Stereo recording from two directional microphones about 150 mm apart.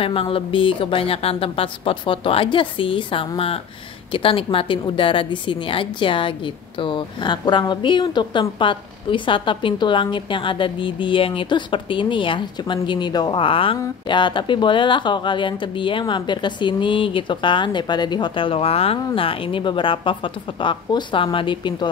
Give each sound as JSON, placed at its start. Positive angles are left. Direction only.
{"t": 0.0, "sound": "a woman's voice", "side_deg": 40}